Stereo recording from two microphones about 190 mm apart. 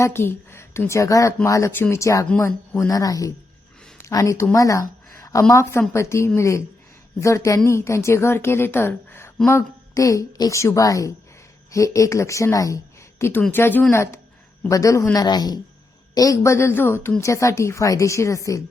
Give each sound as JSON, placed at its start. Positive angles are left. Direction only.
{"t": 0.0, "sound": "a woman's voice", "side_deg": 10}